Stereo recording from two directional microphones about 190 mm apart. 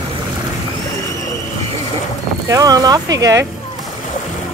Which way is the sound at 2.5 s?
20° right (ahead or behind).